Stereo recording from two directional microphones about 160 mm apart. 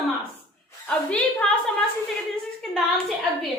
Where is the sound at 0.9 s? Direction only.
10° left (ahead or behind).